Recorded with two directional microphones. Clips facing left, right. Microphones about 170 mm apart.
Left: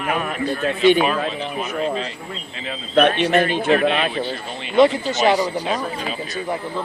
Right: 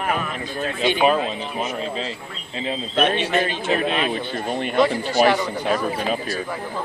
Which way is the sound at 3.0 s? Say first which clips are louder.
Left 5 dB; 55° left (ahead or behind).